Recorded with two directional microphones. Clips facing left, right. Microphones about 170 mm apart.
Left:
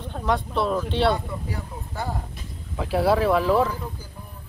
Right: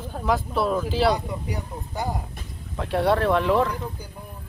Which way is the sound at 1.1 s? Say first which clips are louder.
Right 1 dB; 15° right (ahead or behind).